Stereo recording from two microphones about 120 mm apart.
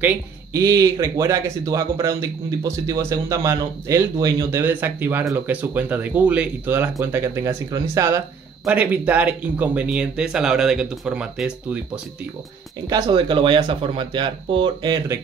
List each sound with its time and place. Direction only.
0.5 s speech: 25° right (ahead or behind)
4.6 s speech: 15° right (ahead or behind)
8.6 s speech: 10° right (ahead or behind)
12.9 s speech: 40° right (ahead or behind)